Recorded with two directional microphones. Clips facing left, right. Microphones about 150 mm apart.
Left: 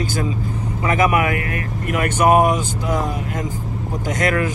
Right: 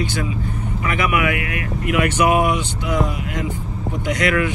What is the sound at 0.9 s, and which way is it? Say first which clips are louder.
Speech: left 3 dB; 40° left (ahead or behind).